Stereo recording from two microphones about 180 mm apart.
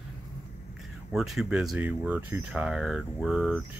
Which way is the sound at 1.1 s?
Centre (ahead or behind).